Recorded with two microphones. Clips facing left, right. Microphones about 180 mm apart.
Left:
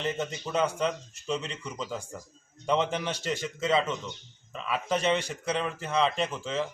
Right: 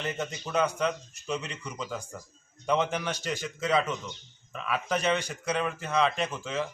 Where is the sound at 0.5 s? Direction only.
30° left (ahead or behind).